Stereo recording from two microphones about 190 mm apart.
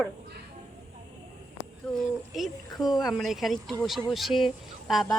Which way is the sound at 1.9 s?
5° left (ahead or behind).